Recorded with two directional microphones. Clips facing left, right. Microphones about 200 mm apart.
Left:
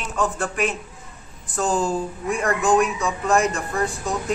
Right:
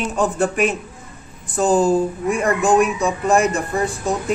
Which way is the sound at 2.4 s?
15° right (ahead or behind).